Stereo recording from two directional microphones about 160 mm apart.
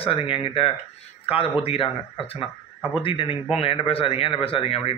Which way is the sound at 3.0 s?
35° left (ahead or behind).